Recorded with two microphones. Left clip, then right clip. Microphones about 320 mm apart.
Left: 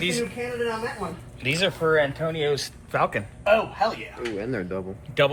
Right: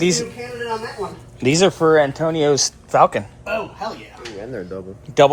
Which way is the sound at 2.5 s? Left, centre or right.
Centre.